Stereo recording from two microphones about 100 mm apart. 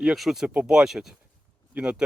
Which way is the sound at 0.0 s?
5° right (ahead or behind).